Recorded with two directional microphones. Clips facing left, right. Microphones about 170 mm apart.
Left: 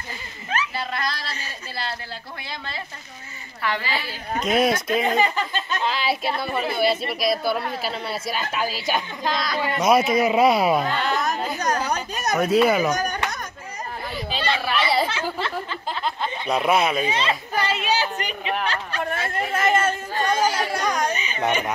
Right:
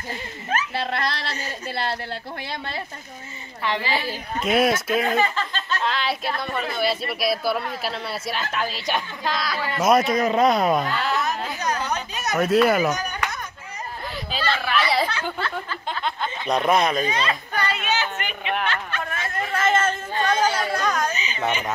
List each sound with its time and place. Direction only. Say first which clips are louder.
0.7 s speech: right 2 dB; 65° right (ahead or behind)
1.3 s a woman's voice: right 5 dB; 45° right (ahead or behind)
3.6 s a woman's voice: right 1 dB; 20° right (ahead or behind)
4.4 s speech: even; 5° right (ahead or behind)
5.0 s speech: left 1 dB; 20° left (ahead or behind); by 11.6 s centre (ahead or behind)
11.9 s speech: left 1 dB; 40° left (ahead or behind)
12.3 s speech: even; centre (ahead or behind)
12.9 s a sound: left 3 dB; 40° left (ahead or behind)
14.1 s chatter: left 1 dB; centre (ahead or behind)
15.9 s speech: even; centre (ahead or behind)
17.1 s a woman's voice: left 1 dB; 25° left (ahead or behind)
18.7 s a sound: left 2 dB; 35° left (ahead or behind); by 20.0 s 10° left (ahead or behind)
20.4 s chatter: even; 10° left (ahead or behind)
21.1 s a sound: left 2 dB; 55° left (ahead or behind)